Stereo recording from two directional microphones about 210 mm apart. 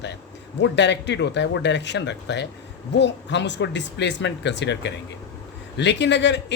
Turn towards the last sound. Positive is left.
turn(degrees=55)  # may be behind; listen again after turning